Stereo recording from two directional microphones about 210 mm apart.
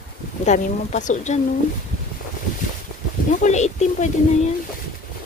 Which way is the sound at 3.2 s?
35° left (ahead or behind).